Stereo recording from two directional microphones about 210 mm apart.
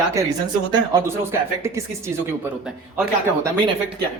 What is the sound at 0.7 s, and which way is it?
Speech, 15° right (ahead or behind).